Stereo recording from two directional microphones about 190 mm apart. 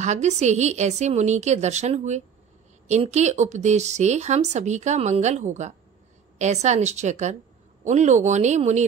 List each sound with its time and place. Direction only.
0.0 s speech: 40° right (ahead or behind)